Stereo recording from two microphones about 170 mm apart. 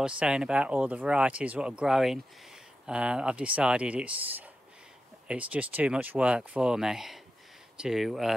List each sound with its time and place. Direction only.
0.0 s speech: 5° right (ahead or behind)